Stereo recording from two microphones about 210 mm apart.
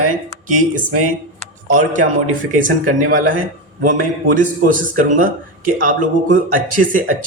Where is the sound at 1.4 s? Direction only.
35° right (ahead or behind).